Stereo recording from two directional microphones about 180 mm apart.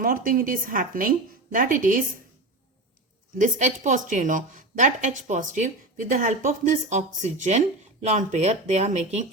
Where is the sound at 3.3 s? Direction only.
45° right (ahead or behind).